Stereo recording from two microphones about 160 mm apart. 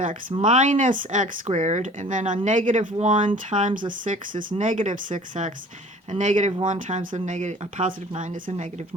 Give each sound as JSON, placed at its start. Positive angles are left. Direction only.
{"t": 0.0, "sound": "speech", "side_deg": -55}